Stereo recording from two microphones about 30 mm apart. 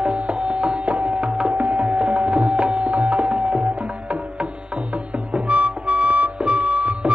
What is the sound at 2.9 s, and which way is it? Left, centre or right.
Music, right.